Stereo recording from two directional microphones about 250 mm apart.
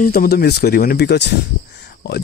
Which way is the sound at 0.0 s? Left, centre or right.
Left.